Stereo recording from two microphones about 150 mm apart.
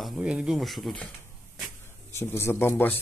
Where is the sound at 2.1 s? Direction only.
15° left (ahead or behind).